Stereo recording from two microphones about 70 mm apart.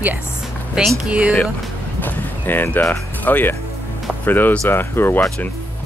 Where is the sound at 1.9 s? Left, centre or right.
Left.